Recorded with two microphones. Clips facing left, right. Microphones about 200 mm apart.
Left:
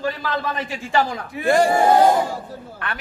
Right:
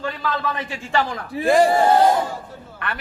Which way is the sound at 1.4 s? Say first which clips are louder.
Right 1 dB; centre (ahead or behind).